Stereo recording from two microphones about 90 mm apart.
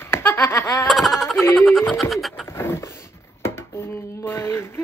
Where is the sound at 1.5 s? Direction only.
Centre (ahead or behind).